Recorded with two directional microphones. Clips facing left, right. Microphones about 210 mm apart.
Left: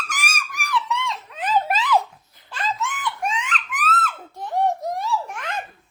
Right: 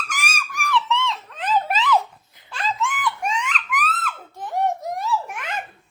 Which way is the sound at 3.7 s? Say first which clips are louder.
Left 3 dB; centre (ahead or behind).